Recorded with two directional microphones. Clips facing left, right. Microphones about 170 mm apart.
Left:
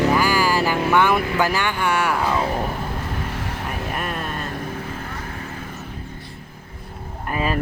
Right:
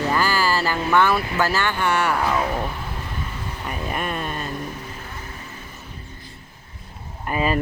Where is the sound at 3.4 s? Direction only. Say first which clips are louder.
Left 2 dB; 80° left.